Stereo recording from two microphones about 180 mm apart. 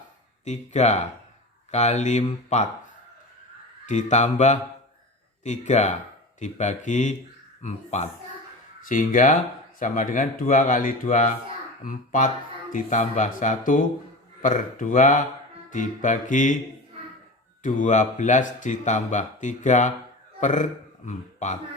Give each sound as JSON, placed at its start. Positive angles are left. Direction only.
{"t": 0.4, "sound": "speech", "side_deg": 40}
{"t": 3.8, "sound": "speech", "side_deg": 40}
{"t": 17.6, "sound": "a man's voice", "side_deg": 45}